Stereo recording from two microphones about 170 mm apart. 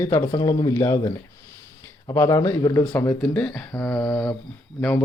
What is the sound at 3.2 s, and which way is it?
A man's voice, 5° left (ahead or behind).